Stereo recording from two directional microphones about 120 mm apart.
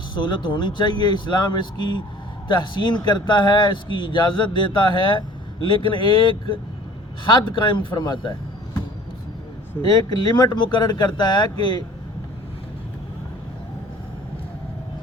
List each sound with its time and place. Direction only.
0.1 s speech: 40° left (ahead or behind)
9.8 s speech: 35° left (ahead or behind)